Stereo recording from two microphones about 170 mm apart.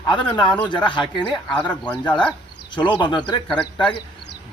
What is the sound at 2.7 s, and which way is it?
Speech, 30° left (ahead or behind).